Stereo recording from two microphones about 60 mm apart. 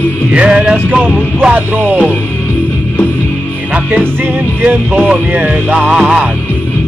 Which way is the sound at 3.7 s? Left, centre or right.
Right.